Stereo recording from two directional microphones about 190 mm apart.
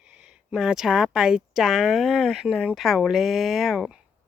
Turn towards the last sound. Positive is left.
turn(degrees=-5)  # may be behind; listen again after turning